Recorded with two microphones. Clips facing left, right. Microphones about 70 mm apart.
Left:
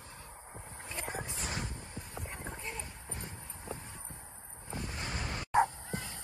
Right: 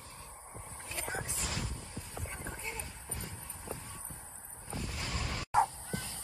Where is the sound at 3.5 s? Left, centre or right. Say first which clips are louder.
Even; left.